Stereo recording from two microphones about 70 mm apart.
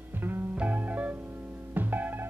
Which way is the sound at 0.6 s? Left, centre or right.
Right.